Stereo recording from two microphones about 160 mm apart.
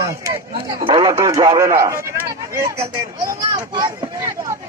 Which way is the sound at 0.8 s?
30° right (ahead or behind).